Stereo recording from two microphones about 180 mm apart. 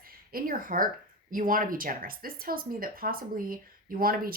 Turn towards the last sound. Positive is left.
turn(degrees=-55)  # may be behind; listen again after turning